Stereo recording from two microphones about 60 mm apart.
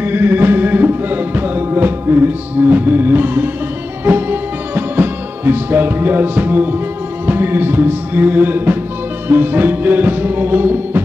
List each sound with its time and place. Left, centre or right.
0.0 s music: right